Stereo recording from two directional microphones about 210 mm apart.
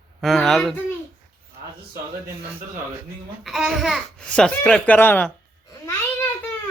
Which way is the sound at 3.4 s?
Centre (ahead or behind).